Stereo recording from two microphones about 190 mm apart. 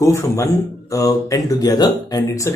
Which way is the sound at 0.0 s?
15° left (ahead or behind).